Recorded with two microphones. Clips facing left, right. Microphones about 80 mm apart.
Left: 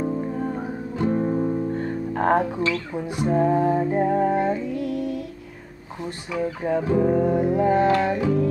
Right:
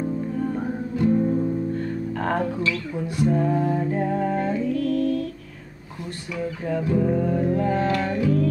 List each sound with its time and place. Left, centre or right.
0.0 s music: left
0.9 s music: left; by 5.3 s centre
6.3 s speech: left
7.4 s music: centre